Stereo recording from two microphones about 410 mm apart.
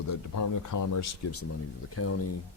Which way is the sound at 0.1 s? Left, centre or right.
Left.